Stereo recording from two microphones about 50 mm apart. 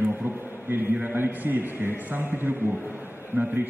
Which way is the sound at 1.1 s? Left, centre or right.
Right.